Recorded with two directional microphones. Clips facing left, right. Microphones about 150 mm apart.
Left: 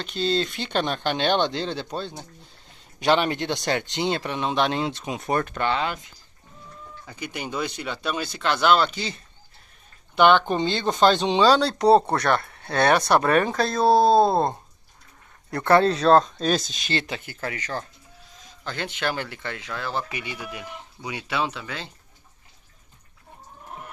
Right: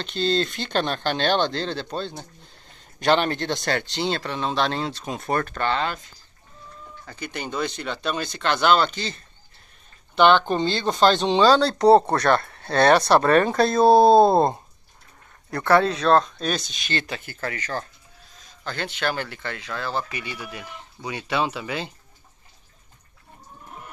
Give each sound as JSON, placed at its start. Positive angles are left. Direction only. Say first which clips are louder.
{"t": 0.0, "sound": "speech", "louder": "right 1 dB", "side_deg": 5}
{"t": 7.1, "sound": "speech", "louder": "right 1 dB", "side_deg": 10}
{"t": 13.5, "sound": "speech", "louder": "right 4 dB", "side_deg": -5}
{"t": 15.5, "sound": "speech", "louder": "left 1 dB", "side_deg": 20}
{"t": 15.9, "sound": "speech", "louder": "left 2 dB", "side_deg": 0}
{"t": 16.7, "sound": "speech", "louder": "left 1 dB", "side_deg": 35}
{"t": 17.0, "sound": "speech", "louder": "right 1 dB", "side_deg": 15}